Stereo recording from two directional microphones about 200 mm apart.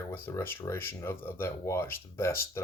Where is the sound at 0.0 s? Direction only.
10° left (ahead or behind).